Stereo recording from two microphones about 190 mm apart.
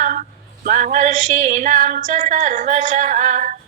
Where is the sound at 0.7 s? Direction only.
45° right (ahead or behind).